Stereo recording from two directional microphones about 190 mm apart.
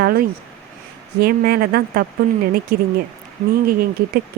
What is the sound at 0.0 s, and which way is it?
Speech, 55° right (ahead or behind).